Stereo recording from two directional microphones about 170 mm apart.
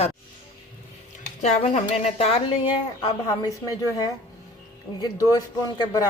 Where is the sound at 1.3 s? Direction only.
40° left (ahead or behind).